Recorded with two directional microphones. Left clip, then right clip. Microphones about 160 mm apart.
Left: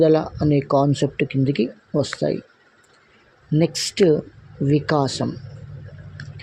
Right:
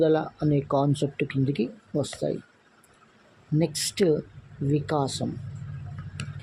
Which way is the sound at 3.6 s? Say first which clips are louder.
Left 7 dB; 35° left (ahead or behind).